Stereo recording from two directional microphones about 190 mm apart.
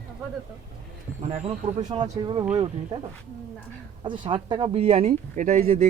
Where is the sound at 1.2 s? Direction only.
30° right (ahead or behind).